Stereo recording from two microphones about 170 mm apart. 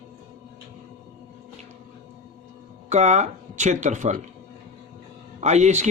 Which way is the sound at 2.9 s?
40° right (ahead or behind).